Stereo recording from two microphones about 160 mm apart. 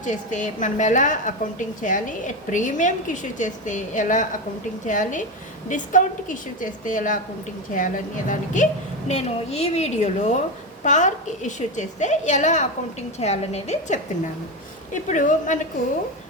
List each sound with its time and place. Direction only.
0.0 s a woman's voice: 50° left (ahead or behind)
9.0 s a woman's voice: 45° left (ahead or behind)
15.1 s a woman's voice: 50° left (ahead or behind)